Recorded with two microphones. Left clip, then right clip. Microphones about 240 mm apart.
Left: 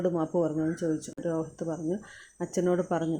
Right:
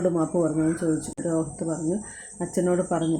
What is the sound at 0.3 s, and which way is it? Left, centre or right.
A woman's voice, left.